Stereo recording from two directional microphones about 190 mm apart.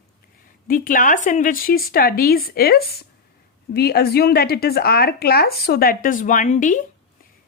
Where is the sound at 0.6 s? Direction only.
45° left (ahead or behind).